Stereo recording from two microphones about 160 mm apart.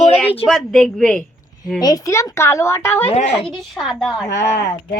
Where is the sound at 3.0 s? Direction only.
40° left (ahead or behind).